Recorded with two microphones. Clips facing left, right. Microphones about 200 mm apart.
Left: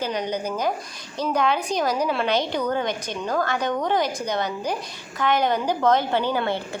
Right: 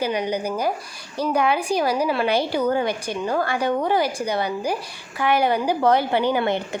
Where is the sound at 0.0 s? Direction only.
10° right (ahead or behind).